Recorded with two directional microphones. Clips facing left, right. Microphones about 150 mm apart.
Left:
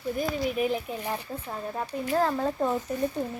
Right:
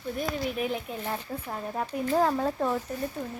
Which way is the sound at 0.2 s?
Centre (ahead or behind).